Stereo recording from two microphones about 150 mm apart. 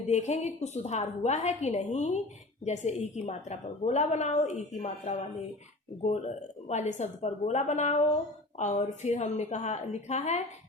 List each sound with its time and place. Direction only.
0.1 s a woman's voice: 50° left (ahead or behind)